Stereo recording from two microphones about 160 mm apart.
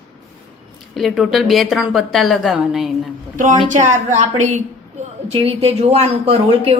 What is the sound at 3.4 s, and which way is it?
A woman's voice, 50° right (ahead or behind).